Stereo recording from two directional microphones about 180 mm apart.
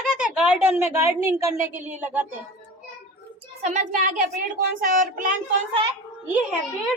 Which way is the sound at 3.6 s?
40° right (ahead or behind).